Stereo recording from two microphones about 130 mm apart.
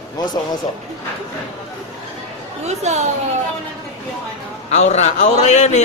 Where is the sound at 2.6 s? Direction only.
55° right (ahead or behind).